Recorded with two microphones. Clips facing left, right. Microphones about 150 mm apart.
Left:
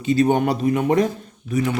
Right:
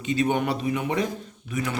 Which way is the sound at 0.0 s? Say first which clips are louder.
Left 6 dB; 35° left (ahead or behind).